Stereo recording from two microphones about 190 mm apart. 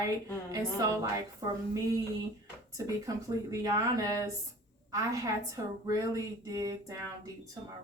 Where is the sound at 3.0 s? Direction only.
15° right (ahead or behind).